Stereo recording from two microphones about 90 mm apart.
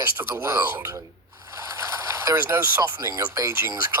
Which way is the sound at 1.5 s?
35° right (ahead or behind).